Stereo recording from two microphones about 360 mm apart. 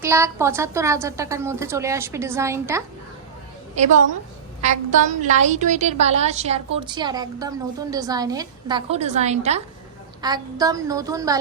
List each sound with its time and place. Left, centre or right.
0.0 s a woman's voice: centre
4.6 s a woman's voice: centre